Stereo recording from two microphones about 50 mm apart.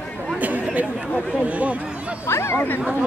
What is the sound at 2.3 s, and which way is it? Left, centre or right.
Speech, left.